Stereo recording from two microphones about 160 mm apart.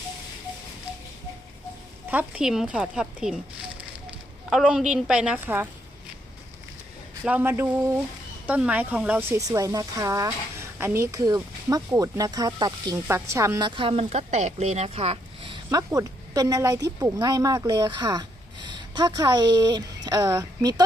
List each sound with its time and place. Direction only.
2.0 s speech: 10° right (ahead or behind)
4.4 s a woman's voice: 5° right (ahead or behind)
7.3 s speech: 10° right (ahead or behind); by 15.8 s 30° right (ahead or behind)
15.9 s speech: 20° right (ahead or behind)